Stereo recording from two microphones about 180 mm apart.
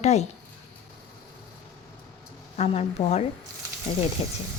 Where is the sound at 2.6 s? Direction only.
35° left (ahead or behind).